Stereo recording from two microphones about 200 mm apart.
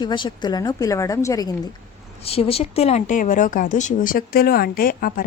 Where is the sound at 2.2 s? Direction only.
30° left (ahead or behind).